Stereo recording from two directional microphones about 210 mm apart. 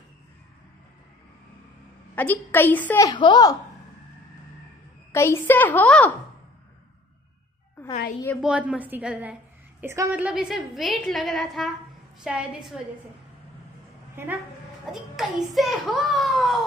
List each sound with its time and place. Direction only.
2.1 s a woman's voice: 10° left (ahead or behind)
3.1 s speech: 20° left (ahead or behind)
5.1 s a woman's voice: 10° left (ahead or behind)
8.4 s a woman's voice: 5° right (ahead or behind)
14.1 s a woman's voice: 10° right (ahead or behind)